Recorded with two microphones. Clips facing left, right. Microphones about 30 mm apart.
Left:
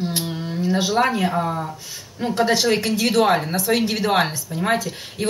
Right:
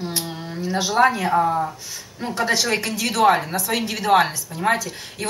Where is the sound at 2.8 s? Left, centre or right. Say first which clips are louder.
Left 2 dB; left.